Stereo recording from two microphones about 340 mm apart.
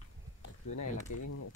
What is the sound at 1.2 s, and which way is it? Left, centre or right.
Speech, left.